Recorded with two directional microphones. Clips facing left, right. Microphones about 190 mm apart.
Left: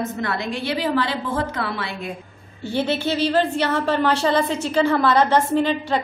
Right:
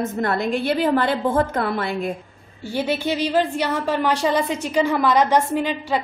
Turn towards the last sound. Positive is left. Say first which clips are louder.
# left 2 dB
turn(degrees=-10)  # may be behind; listen again after turning